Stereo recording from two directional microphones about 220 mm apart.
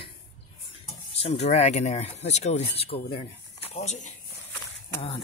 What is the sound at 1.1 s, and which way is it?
Speech, 30° left (ahead or behind).